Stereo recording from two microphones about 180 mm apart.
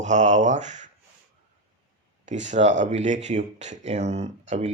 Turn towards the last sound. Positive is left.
turn(degrees=-40)  # may be behind; listen again after turning